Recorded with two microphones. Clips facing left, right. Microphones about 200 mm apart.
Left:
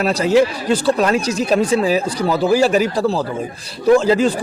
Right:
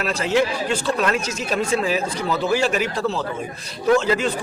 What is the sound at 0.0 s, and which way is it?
A man's voice, 40° left (ahead or behind).